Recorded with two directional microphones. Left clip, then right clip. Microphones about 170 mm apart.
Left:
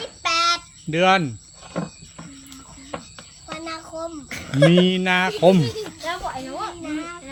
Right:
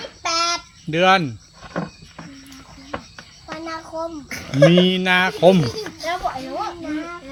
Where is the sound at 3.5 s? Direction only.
25° left (ahead or behind).